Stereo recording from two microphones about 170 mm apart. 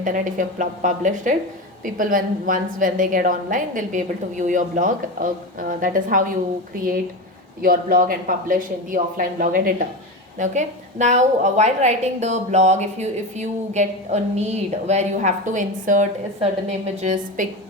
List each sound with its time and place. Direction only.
0.0 s a woman's voice: 50° right (ahead or behind)
7.6 s speech: 55° right (ahead or behind)
10.3 s a woman's voice: 45° right (ahead or behind)